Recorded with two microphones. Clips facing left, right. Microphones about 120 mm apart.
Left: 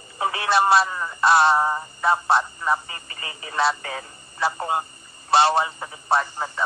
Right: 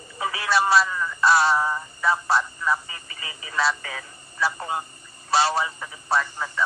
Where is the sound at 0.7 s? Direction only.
35° left (ahead or behind).